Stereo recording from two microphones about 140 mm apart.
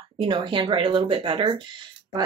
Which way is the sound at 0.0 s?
35° right (ahead or behind).